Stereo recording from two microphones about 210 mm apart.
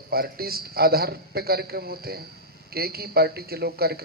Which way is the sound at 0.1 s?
45° right (ahead or behind).